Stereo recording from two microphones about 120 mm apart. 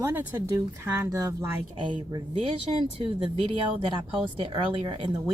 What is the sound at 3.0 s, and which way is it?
Speech, 45° right (ahead or behind).